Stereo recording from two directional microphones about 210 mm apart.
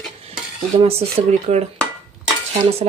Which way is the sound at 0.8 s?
30° right (ahead or behind).